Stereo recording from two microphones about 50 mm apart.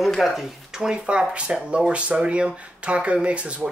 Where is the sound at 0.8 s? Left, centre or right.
Centre.